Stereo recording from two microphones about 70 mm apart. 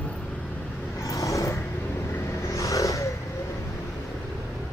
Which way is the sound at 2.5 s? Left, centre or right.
Left.